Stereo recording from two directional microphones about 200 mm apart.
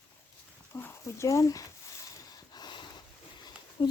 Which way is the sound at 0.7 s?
10° left (ahead or behind).